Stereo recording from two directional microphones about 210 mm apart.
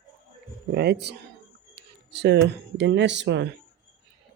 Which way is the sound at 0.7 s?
50° right (ahead or behind).